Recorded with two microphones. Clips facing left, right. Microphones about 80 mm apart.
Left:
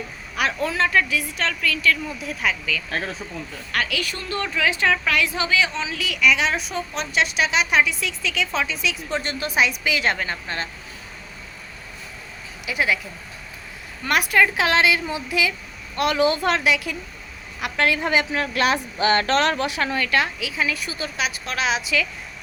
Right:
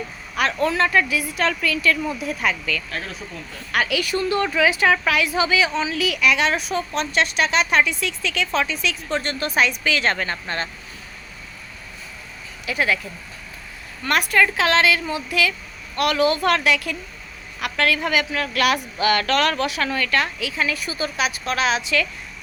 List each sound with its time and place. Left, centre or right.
0.3 s a woman's voice: centre
12.6 s a woman's voice: centre
14.0 s a woman's voice: centre
20.6 s a woman's voice: centre